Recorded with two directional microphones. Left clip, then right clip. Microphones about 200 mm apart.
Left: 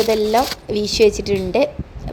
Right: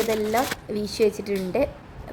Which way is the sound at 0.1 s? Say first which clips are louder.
Left 7 dB; 20° left (ahead or behind).